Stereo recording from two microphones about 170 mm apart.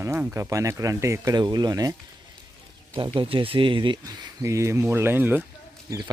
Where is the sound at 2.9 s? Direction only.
30° right (ahead or behind); by 5.4 s 10° right (ahead or behind).